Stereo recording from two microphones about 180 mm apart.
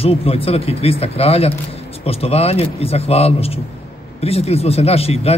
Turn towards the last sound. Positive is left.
turn(degrees=35)  # may be behind; listen again after turning